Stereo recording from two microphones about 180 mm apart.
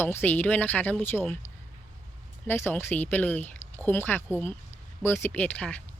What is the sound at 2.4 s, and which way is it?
Speech, 10° left (ahead or behind).